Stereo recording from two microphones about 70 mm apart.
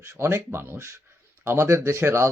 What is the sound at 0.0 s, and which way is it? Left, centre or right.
Speech, right.